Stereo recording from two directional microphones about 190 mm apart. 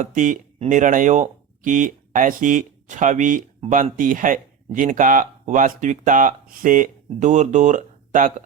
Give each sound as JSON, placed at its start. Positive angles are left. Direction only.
{"t": 0.0, "sound": "speech", "side_deg": -40}